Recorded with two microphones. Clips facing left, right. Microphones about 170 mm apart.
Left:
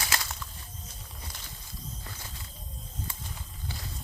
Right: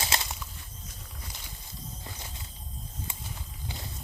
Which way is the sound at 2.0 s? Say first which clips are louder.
Right 1 dB; 20° right (ahead or behind).